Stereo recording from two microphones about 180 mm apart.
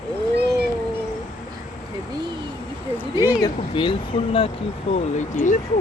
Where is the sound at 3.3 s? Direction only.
25° left (ahead or behind).